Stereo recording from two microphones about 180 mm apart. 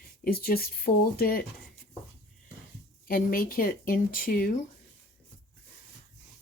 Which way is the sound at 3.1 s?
55° left (ahead or behind).